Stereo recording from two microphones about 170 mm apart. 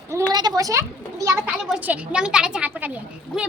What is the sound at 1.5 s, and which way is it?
A woman's voice, 5° right (ahead or behind).